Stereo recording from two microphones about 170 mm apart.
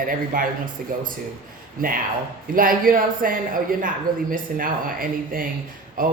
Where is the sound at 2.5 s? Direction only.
55° right (ahead or behind).